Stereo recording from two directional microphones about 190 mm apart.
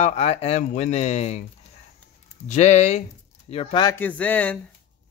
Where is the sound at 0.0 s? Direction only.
35° left (ahead or behind).